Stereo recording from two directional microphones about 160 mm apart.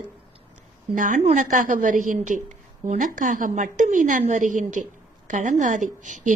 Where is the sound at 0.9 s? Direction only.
55° right (ahead or behind).